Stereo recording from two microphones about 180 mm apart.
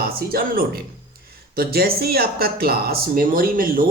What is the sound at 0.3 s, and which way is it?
Speech, 55° right (ahead or behind).